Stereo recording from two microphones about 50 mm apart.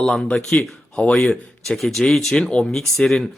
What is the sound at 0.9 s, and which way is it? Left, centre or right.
Speech, left.